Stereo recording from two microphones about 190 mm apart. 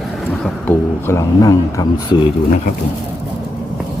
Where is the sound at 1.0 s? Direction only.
15° left (ahead or behind).